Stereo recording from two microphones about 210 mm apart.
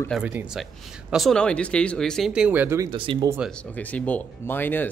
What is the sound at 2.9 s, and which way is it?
Speech, 20° right (ahead or behind).